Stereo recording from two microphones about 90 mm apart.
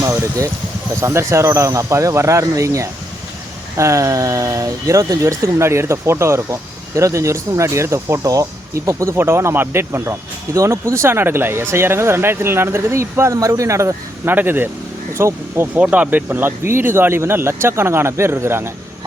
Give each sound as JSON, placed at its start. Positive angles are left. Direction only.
{"t": 0.0, "sound": "vehicle", "side_deg": -35}
{"t": 1.0, "sound": "speech", "side_deg": -30}
{"t": 14.3, "sound": "speech", "side_deg": -25}
{"t": 15.8, "sound": "speech", "side_deg": -15}